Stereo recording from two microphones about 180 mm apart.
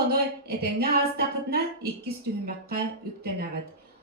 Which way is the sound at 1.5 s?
60° right (ahead or behind).